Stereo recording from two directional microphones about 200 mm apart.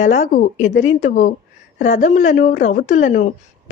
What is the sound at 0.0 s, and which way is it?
Speech, 40° left (ahead or behind).